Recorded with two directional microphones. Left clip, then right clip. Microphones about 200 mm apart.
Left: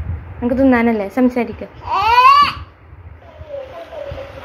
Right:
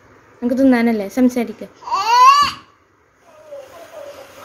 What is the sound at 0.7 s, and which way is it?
Speech, 20° right (ahead or behind).